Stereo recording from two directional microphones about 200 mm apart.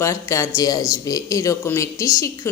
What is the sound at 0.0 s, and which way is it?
Speech, 15° left (ahead or behind).